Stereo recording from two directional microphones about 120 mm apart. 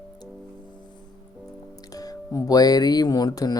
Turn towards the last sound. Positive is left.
turn(degrees=35)  # may be behind; listen again after turning